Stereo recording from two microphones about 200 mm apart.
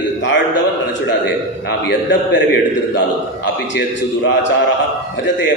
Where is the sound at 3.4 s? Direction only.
65° left (ahead or behind).